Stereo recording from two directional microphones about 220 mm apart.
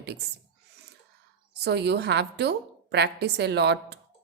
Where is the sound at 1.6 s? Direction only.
50° right (ahead or behind).